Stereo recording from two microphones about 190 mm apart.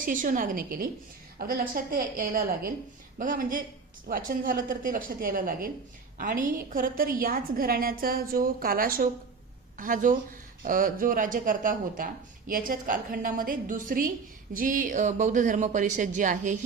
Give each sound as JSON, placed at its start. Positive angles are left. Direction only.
{"t": 0.0, "sound": "speech", "side_deg": -45}